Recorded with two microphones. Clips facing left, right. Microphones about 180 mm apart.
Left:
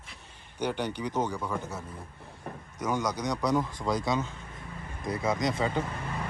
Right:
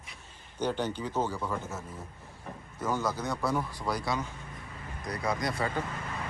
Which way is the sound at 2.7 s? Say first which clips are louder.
Left 1 dB; 15° left (ahead or behind).